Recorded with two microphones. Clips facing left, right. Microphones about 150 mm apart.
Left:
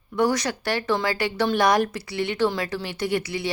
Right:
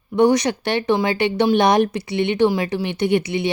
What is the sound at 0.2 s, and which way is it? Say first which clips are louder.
A woman's voice: right 7 dB; 20° right (ahead or behind).